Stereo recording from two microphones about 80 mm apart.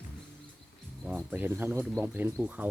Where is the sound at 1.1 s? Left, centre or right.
Right.